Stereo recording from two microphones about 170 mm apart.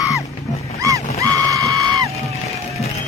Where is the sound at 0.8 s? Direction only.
20° right (ahead or behind).